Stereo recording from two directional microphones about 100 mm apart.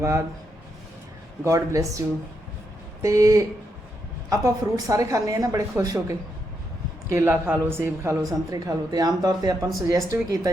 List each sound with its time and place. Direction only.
0.0 s speech: 30° right (ahead or behind)
1.5 s a woman's voice: 35° right (ahead or behind)
7.1 s speech: 25° right (ahead or behind)
8.2 s a woman's voice: 35° right (ahead or behind)